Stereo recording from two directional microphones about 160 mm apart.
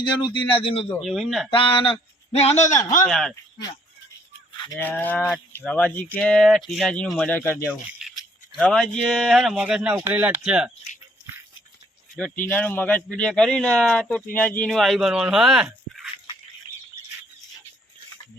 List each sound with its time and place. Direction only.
0.5 s speech: 35° left (ahead or behind)
1.0 s speech: centre (ahead or behind)
1.5 s speech: 30° left (ahead or behind)
3.1 s speech: 5° left (ahead or behind)
4.5 s a sound: 30° left (ahead or behind)
4.8 s speech: 10° left (ahead or behind)
7.7 s speech: 5° right (ahead or behind)
8.5 s speech: 5° left (ahead or behind)
12.1 s speech: 10° left (ahead or behind)